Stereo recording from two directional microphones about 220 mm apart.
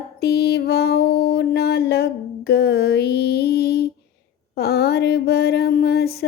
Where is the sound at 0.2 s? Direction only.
45° left (ahead or behind).